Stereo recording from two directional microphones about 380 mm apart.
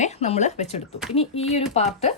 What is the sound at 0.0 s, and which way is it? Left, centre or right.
Speech, centre.